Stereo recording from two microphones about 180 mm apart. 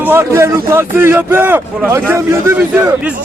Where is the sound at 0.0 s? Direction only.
10° right (ahead or behind).